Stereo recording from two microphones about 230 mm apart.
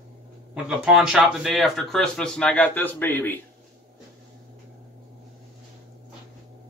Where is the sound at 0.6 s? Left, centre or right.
Centre.